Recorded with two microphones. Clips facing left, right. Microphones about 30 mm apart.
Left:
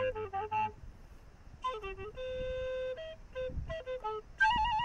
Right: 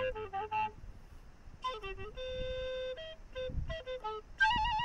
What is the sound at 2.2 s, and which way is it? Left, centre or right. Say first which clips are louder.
Music: left 2 dB; right.